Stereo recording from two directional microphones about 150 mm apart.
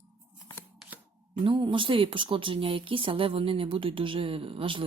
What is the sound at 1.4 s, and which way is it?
Speech, 35° right (ahead or behind).